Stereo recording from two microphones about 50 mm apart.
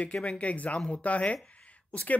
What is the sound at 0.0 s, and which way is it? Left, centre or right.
Speech, left.